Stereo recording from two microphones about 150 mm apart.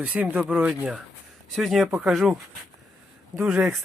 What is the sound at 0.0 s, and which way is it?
Speech, 10° right (ahead or behind).